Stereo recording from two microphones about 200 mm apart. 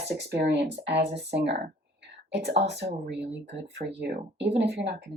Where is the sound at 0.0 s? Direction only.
55° right (ahead or behind).